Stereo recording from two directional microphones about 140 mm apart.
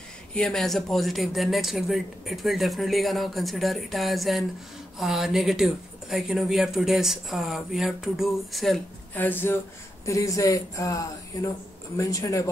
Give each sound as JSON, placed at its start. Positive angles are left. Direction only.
{"t": 0.3, "sound": "speech", "side_deg": 5}
{"t": 9.1, "sound": "speech", "side_deg": 15}